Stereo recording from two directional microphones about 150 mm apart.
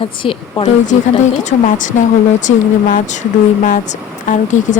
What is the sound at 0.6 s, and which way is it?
Speech, 55° left (ahead or behind).